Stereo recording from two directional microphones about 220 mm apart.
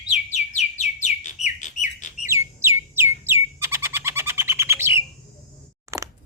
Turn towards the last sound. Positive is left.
turn(degrees=-15)  # may be behind; listen again after turning